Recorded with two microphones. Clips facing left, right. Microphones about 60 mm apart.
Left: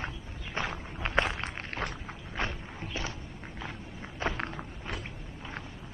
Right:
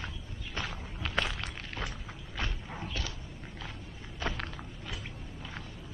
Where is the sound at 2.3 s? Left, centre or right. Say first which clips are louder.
Left 3 dB; left.